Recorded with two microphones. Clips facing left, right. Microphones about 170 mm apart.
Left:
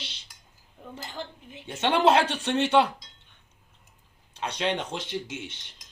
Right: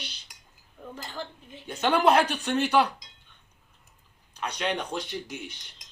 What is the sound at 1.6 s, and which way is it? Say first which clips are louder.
Speech: even; 25° left (ahead or behind).